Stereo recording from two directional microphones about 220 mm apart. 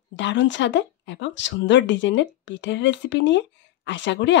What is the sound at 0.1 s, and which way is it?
Speech, 55° left (ahead or behind).